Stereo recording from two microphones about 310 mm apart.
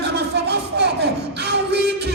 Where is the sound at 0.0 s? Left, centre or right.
Right.